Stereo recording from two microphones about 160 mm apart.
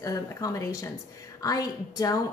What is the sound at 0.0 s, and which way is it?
A woman's voice, 20° left (ahead or behind).